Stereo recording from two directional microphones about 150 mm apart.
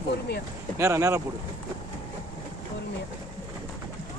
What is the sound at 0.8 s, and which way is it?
Speech, 20° right (ahead or behind).